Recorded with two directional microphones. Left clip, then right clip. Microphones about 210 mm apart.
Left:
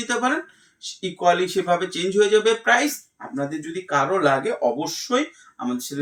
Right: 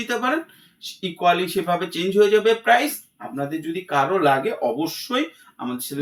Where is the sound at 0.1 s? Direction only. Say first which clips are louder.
Left 1 dB; 5° right (ahead or behind).